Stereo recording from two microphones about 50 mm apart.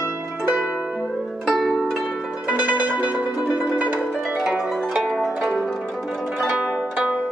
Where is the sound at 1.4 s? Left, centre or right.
Centre.